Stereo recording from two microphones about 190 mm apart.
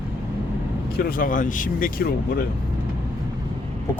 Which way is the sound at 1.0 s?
50° left (ahead or behind).